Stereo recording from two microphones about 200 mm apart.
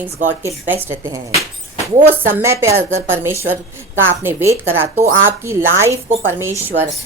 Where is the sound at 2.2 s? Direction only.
10° right (ahead or behind).